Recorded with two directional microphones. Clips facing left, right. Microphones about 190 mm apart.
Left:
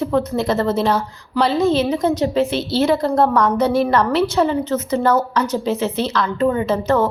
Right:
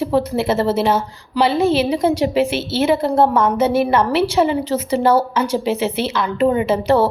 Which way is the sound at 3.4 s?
5° right (ahead or behind).